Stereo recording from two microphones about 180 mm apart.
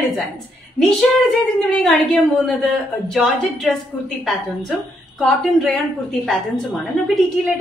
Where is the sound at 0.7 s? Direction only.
Centre (ahead or behind).